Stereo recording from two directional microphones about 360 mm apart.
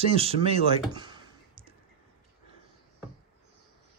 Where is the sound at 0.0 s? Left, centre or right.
Centre.